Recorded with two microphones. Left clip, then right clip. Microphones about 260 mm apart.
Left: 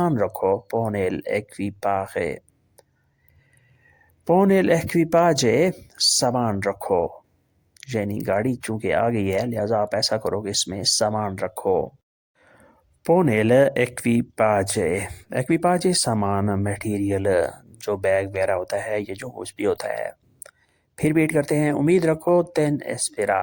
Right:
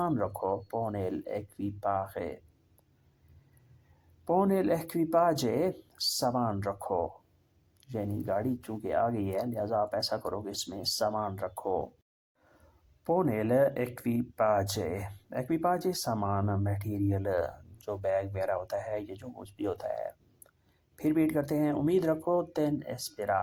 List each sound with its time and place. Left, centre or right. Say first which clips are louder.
0.0 s speech: left 9 dB; left
4.3 s speech: left 10 dB; left
13.1 s speech: left 10 dB; left